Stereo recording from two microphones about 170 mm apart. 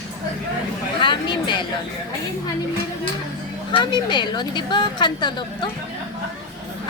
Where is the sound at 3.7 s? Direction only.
25° left (ahead or behind).